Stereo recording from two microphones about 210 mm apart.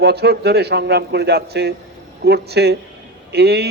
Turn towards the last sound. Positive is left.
turn(degrees=-50)  # may be behind; listen again after turning